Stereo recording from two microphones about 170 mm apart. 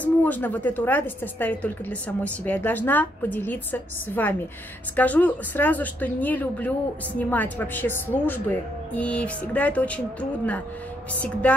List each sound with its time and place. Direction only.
0.0 s a woman's voice: 10° left (ahead or behind)